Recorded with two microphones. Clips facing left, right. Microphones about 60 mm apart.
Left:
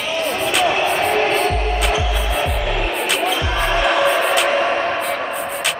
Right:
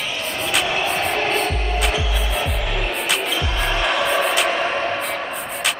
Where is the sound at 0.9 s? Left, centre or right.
Centre.